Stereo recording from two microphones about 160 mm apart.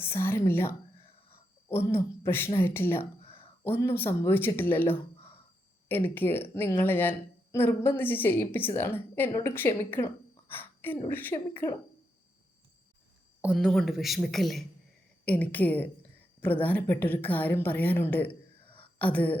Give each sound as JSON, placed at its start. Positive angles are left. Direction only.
{"t": 0.0, "sound": "a woman's voice", "side_deg": 15}
{"t": 10.5, "sound": "a sound", "side_deg": 10}
{"t": 11.1, "sound": "a woman's voice", "side_deg": 10}
{"t": 13.4, "sound": "a man's voice", "side_deg": -5}
{"t": 18.6, "sound": "a sound", "side_deg": 35}
{"t": 18.9, "sound": "a woman's voice", "side_deg": 10}